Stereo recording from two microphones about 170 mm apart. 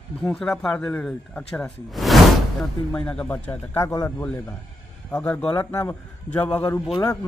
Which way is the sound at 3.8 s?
20° left (ahead or behind).